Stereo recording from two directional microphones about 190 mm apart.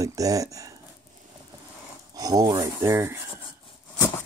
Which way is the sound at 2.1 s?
20° right (ahead or behind).